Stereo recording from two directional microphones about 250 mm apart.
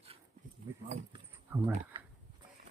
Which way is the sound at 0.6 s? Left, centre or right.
Centre.